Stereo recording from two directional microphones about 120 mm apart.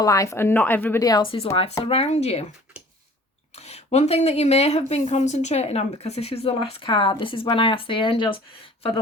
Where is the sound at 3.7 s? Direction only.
70° left (ahead or behind); by 8.4 s 45° left (ahead or behind).